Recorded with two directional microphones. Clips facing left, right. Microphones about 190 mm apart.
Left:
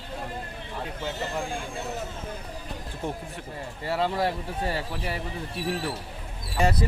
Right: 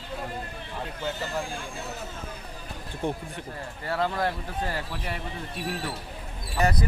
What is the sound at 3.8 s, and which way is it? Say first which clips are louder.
Speech: left 1 dB; 25° left (ahead or behind).